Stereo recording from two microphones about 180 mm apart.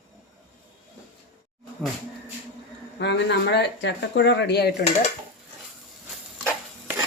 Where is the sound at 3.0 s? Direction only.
70° left (ahead or behind).